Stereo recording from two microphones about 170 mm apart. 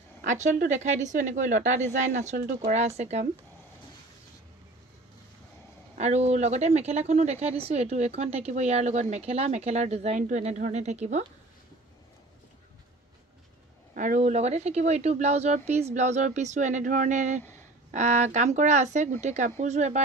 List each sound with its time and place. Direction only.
0.2 s speech: 45° right (ahead or behind)
5.9 s speech: 40° right (ahead or behind)
13.9 s speech: 50° right (ahead or behind)